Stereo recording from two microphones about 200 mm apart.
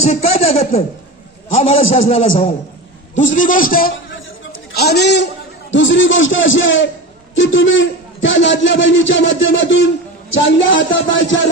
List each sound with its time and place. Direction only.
0.0 s a man's voice: 30° left (ahead or behind)
3.2 s a man's voice: 40° left (ahead or behind); by 11.4 s 65° left (ahead or behind)